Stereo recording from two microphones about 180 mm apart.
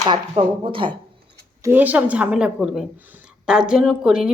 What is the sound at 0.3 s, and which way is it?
Speech, 30° right (ahead or behind).